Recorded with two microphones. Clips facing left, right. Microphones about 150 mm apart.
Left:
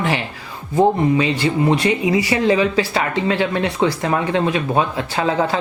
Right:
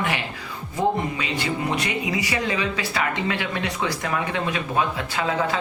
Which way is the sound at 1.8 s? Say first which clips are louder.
Left 8 dB; 30° left (ahead or behind).